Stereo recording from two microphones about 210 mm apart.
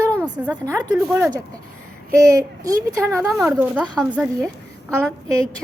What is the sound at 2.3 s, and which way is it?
Speech, 15° right (ahead or behind).